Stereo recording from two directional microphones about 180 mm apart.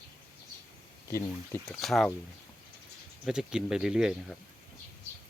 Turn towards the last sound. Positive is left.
turn(degrees=-5)  # may be behind; listen again after turning